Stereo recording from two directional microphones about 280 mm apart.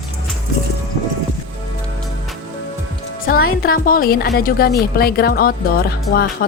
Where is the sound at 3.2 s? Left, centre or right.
Left.